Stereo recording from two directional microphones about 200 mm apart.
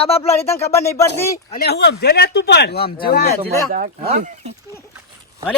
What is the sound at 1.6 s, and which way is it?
Speech, 60° left (ahead or behind).